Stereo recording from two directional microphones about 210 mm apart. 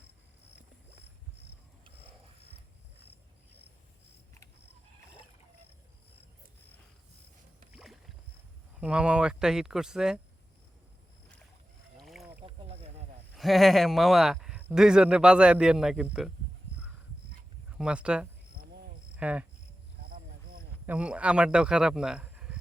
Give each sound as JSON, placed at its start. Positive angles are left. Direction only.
{"t": 7.7, "sound": "rowboat", "side_deg": 0}
{"t": 8.8, "sound": "speech", "side_deg": -5}
{"t": 11.9, "sound": "rowboat", "side_deg": 0}
{"t": 12.5, "sound": "a sound", "side_deg": -30}
{"t": 13.3, "sound": "speech", "side_deg": 0}
{"t": 17.7, "sound": "speech", "side_deg": -5}
{"t": 20.0, "sound": "a sound", "side_deg": -45}
{"t": 20.8, "sound": "speech", "side_deg": -5}